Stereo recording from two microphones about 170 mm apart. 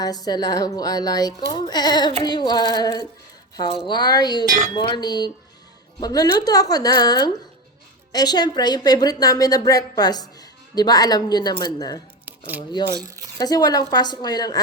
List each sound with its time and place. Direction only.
0.0 s a woman's voice: 20° left (ahead or behind)
12.2 s a sound: 10° right (ahead or behind)
13.4 s a woman's voice: 20° left (ahead or behind)